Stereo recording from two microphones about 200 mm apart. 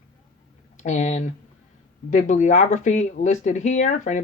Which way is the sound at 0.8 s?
35° left (ahead or behind).